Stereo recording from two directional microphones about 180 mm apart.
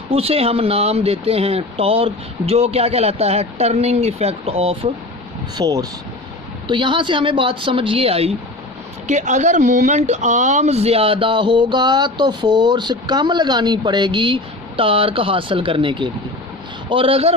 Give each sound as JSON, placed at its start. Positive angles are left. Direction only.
{"t": 0.1, "sound": "speech", "side_deg": -35}
{"t": 5.5, "sound": "speech", "side_deg": -20}